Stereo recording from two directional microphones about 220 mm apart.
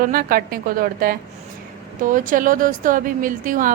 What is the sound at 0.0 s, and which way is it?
Speech, 40° right (ahead or behind).